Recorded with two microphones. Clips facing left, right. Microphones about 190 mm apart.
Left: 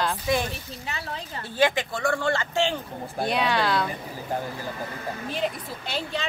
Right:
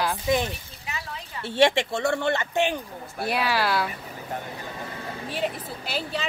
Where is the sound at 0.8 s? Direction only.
35° left (ahead or behind).